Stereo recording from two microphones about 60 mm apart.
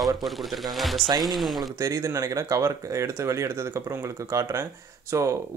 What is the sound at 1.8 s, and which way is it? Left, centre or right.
Speech, right.